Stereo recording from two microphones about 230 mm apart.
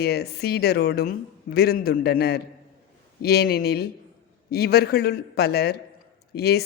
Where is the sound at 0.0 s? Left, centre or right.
Left.